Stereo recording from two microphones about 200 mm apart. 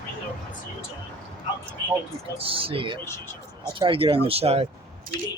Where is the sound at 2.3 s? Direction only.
25° right (ahead or behind).